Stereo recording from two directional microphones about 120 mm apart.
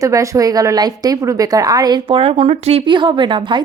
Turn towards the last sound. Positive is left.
turn(degrees=-45)  # may be behind; listen again after turning